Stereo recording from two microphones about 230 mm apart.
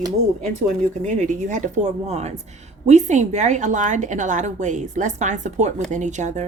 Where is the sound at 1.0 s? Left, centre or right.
Right.